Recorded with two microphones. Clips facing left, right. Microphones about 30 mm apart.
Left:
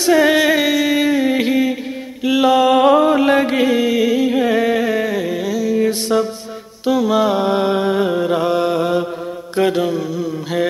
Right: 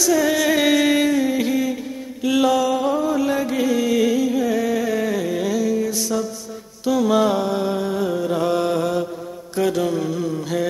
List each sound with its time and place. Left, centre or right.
0.0 s music: left
0.6 s music: centre
1.0 s a sound: left
1.3 s music: left
2.2 s mantra: left
2.6 s mantra: left
4.2 s music: left; by 5.8 s centre
5.8 s music: left
6.9 s mantra: centre
7.3 s a sound: left
8.4 s mantra: left
9.8 s a sound: centre